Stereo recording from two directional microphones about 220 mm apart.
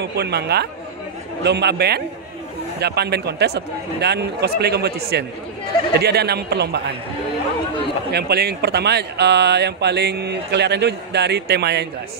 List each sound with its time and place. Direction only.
0.0 s speech: 50° right (ahead or behind)
8.1 s speech: 45° right (ahead or behind)